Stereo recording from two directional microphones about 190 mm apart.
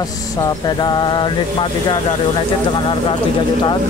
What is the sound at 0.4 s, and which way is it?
Speech, 20° left (ahead or behind).